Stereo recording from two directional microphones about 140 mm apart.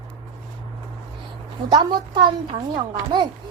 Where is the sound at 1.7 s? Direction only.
30° right (ahead or behind).